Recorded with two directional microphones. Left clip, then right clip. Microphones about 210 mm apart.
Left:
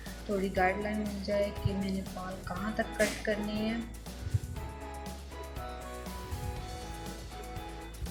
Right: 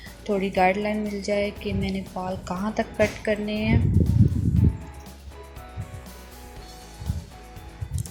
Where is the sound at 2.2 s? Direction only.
15° right (ahead or behind).